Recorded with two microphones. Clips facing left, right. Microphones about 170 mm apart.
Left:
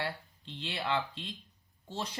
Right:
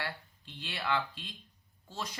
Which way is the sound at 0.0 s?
25° left (ahead or behind).